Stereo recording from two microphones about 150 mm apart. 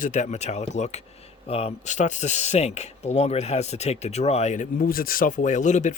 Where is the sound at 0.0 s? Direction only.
55° left (ahead or behind).